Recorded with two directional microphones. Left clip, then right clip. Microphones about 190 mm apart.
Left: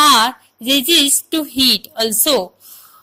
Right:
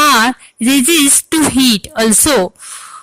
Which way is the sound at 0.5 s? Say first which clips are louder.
Right 2 dB; 90° right.